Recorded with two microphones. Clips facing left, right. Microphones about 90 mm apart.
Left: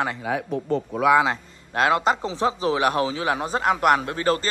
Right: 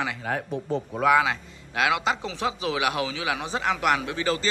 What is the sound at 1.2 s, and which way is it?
A man's voice, 40° left (ahead or behind).